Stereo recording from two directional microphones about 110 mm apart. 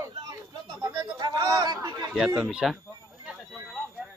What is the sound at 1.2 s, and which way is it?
Chatter, 35° right (ahead or behind).